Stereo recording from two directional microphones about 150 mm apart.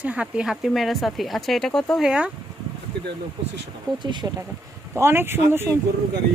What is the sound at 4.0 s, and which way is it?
Speech, 30° right (ahead or behind).